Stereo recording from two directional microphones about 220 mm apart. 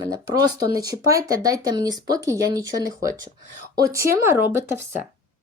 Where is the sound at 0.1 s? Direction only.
15° right (ahead or behind).